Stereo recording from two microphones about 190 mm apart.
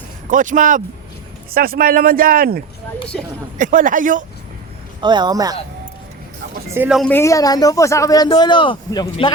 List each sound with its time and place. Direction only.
0.3 s speech: 45° right (ahead or behind)
4.9 s speech: 25° right (ahead or behind)
6.7 s speech: 5° right (ahead or behind)
7.1 s speech: 15° left (ahead or behind)